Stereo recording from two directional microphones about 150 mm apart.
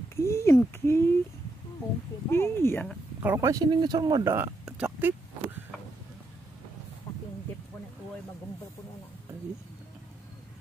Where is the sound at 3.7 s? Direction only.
30° right (ahead or behind).